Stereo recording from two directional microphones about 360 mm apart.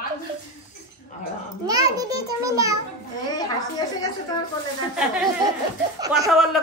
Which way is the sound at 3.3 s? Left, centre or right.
Centre.